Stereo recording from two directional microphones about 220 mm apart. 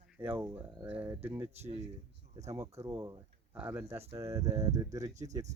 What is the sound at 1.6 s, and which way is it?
Speech, 30° right (ahead or behind).